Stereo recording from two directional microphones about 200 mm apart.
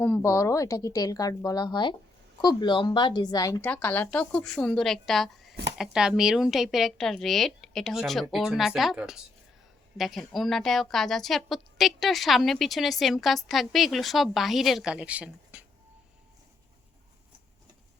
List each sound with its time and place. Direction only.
0.0 s a woman's voice: 10° left (ahead or behind); by 15.6 s 5° right (ahead or behind)